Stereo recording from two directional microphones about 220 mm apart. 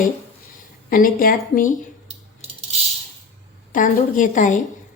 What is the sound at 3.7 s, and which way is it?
Speech, 35° left (ahead or behind).